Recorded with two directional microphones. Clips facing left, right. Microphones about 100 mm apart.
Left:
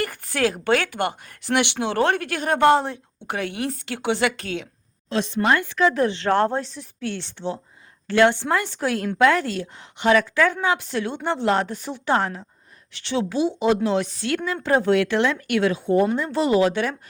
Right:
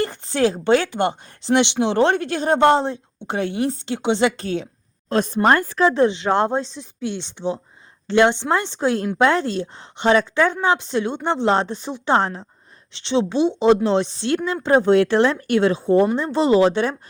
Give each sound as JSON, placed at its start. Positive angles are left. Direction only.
{"t": 0.0, "sound": "speech", "side_deg": -25}
{"t": 6.1, "sound": "speech", "side_deg": -15}